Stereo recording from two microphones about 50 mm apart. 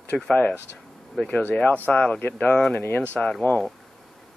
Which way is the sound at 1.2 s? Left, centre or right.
Left.